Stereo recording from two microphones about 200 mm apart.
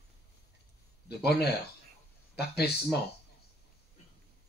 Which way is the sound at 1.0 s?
55° left (ahead or behind).